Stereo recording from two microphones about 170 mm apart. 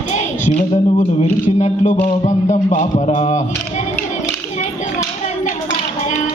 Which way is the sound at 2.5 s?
45° left (ahead or behind).